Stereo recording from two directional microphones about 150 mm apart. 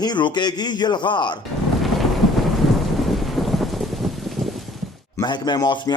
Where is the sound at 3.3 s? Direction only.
Centre (ahead or behind).